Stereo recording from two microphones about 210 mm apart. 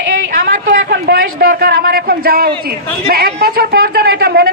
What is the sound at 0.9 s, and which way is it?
A woman's voice, 45° right (ahead or behind).